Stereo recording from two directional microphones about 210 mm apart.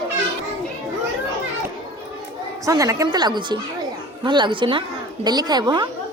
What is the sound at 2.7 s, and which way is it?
A woman's voice, 15° right (ahead or behind).